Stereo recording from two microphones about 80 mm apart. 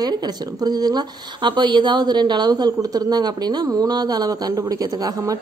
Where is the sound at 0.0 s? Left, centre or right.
Right.